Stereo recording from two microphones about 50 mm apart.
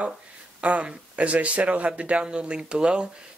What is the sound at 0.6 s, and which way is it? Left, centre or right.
Speech, right.